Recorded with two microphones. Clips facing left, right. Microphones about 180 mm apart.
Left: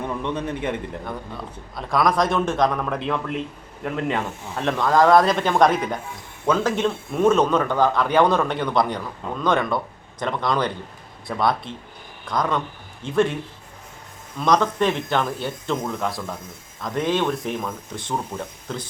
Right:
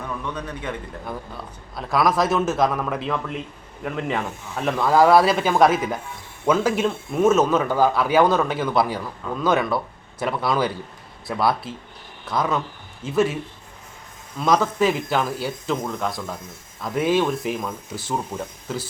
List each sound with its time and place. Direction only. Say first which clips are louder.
0.0 s a man's voice: left 4 dB; 25° left (ahead or behind)
1.0 s speech: left 1 dB; centre (ahead or behind)
14.3 s speech: even; 5° right (ahead or behind)